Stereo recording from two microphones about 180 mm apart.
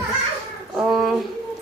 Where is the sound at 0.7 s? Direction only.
5° right (ahead or behind).